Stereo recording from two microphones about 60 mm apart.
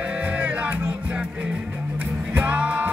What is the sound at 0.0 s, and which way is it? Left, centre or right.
Music, right.